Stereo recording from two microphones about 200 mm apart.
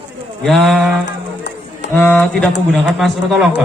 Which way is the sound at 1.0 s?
60° left (ahead or behind).